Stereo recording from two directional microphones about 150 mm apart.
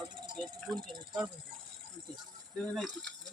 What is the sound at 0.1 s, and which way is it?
Insect, 30° right (ahead or behind).